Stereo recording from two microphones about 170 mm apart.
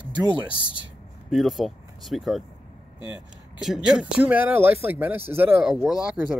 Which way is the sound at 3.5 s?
5° right (ahead or behind).